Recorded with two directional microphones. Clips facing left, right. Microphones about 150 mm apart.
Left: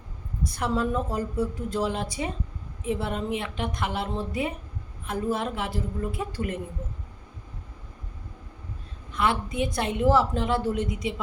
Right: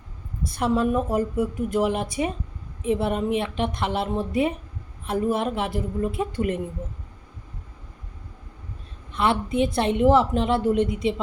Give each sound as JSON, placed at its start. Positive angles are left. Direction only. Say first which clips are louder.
{"t": 0.4, "sound": "a woman's voice", "louder": "right 4 dB", "side_deg": -25}
{"t": 9.1, "sound": "a woman's voice", "louder": "right 4 dB", "side_deg": -25}